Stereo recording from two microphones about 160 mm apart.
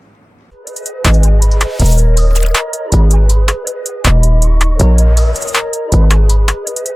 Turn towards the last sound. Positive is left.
turn(degrees=0)  # may be behind; listen again after turning